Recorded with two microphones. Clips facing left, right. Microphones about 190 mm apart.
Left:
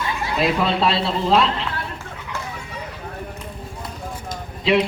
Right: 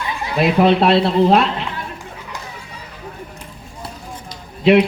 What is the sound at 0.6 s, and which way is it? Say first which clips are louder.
Speech: right 7 dB; 55° right (ahead or behind).